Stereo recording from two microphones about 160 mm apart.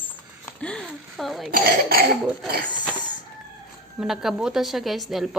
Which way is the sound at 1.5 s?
70° right (ahead or behind).